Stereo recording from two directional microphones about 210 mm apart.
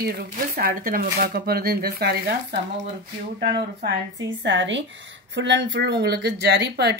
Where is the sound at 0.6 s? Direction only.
45° right (ahead or behind).